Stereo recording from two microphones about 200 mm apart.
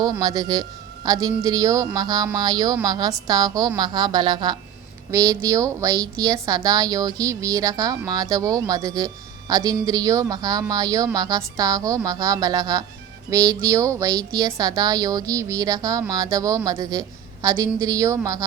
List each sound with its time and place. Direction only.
0.0 s a woman's voice: 20° right (ahead or behind)